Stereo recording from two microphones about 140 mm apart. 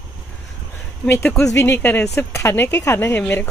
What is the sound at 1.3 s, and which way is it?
Speech, 20° left (ahead or behind).